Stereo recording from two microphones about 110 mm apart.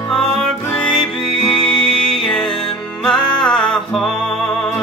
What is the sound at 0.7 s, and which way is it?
Music, 5° left (ahead or behind).